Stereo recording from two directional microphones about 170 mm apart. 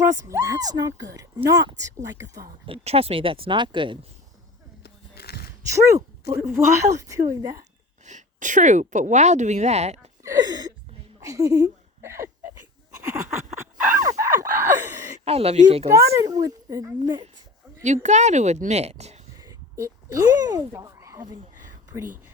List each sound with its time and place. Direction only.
0.0 s speech: 15° right (ahead or behind)
2.6 s speech: 35° right (ahead or behind)
4.8 s a sound: 70° left (ahead or behind)
5.7 s a woman's voice: 15° right (ahead or behind)
8.0 s a woman's voice: 45° right (ahead or behind)
10.2 s a sound: 20° right (ahead or behind)
15.2 s speech: 35° right (ahead or behind)
16.1 s speech: 20° right (ahead or behind)
17.8 s a woman's voice: 45° right (ahead or behind)
19.4 s a sound: 20° right (ahead or behind)